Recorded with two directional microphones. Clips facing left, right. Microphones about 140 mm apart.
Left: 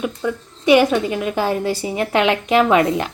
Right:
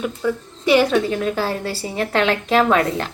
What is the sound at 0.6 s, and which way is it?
A woman's voice, 15° left (ahead or behind).